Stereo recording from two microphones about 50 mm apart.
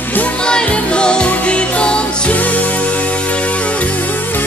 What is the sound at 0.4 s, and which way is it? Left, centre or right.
Music, centre.